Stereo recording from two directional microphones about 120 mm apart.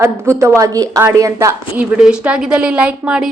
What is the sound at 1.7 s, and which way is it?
Speech, 5° right (ahead or behind).